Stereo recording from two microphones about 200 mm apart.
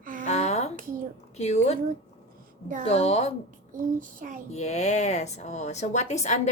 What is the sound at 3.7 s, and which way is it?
Child singing, 40° right (ahead or behind).